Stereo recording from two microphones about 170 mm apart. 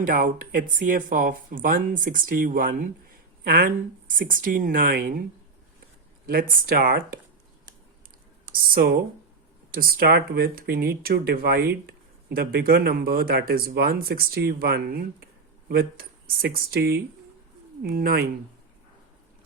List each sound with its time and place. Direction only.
0.0 s speech: 55° right (ahead or behind)
6.2 s speech: 60° right (ahead or behind)
8.5 s speech: 60° right (ahead or behind)